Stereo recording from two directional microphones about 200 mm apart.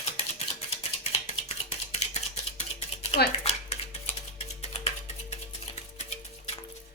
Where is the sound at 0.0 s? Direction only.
30° left (ahead or behind).